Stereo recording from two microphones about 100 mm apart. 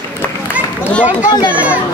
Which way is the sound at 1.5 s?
15° right (ahead or behind).